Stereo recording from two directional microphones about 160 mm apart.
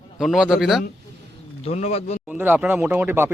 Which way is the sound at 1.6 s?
40° left (ahead or behind).